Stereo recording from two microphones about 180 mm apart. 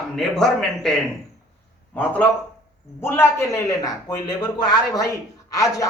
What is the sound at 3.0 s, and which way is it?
A man's voice, 15° left (ahead or behind).